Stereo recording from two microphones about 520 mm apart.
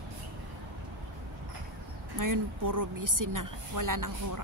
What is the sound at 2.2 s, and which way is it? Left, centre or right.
Speech, right.